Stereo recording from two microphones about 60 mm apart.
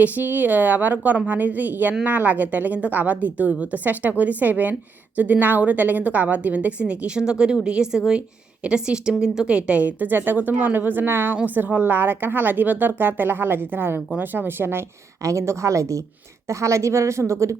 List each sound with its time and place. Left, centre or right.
0.0 s a woman's voice: right
15.2 s a woman's voice: right